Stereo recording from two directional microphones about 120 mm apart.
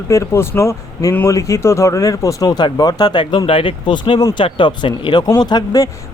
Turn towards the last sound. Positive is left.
turn(degrees=35)  # may be behind; listen again after turning